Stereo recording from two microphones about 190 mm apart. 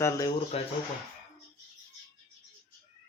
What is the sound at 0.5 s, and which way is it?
Speech, 30° left (ahead or behind).